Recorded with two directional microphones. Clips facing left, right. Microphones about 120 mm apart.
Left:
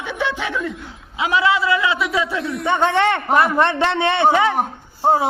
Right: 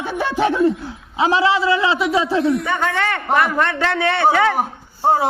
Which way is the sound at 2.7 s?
25° left (ahead or behind).